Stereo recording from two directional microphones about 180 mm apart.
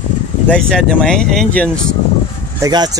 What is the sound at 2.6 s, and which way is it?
Speech, 20° right (ahead or behind).